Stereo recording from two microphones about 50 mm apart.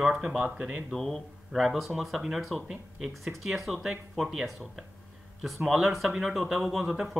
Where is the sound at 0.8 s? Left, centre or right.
Centre.